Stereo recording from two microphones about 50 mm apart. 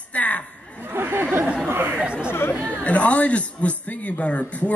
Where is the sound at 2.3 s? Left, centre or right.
Left.